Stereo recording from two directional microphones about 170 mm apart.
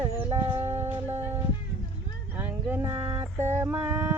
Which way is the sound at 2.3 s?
10° right (ahead or behind).